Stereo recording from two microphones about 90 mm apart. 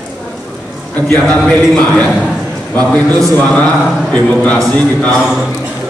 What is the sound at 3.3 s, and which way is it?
Speech, 15° left (ahead or behind).